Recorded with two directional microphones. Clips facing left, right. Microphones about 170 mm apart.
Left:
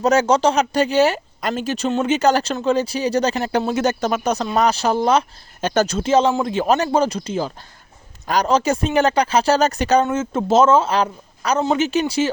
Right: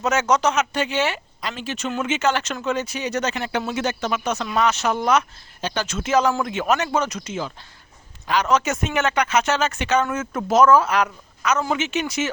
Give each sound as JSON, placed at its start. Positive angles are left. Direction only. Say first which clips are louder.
{"t": 0.0, "sound": "speech", "louder": "left 4 dB", "side_deg": 35}
{"t": 5.5, "sound": "speech", "louder": "left 8 dB", "side_deg": 45}